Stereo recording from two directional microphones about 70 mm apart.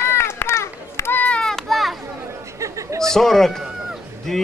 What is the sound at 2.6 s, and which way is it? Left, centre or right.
Chatter, right.